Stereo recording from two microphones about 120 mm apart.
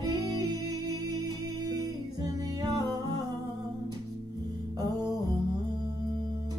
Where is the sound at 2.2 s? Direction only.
30° right (ahead or behind).